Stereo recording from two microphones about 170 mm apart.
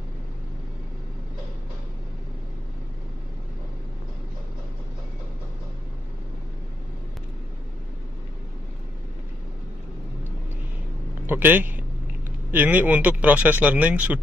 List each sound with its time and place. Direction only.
11.2 s a man's voice: 10° right (ahead or behind)